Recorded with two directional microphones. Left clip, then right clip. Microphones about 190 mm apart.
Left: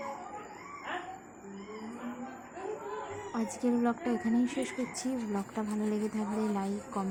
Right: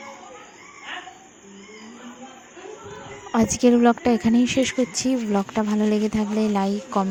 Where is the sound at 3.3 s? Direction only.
40° right (ahead or behind).